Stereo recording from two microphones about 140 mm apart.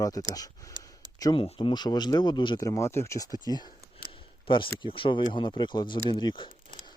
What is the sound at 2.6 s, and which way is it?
Speech, 20° left (ahead or behind).